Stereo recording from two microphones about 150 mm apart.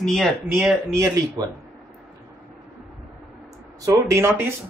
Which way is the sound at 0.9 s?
20° right (ahead or behind).